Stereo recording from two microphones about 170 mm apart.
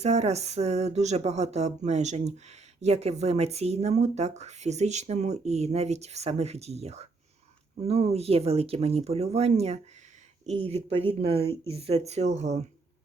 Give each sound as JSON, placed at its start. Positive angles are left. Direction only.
{"t": 0.0, "sound": "speech", "side_deg": -40}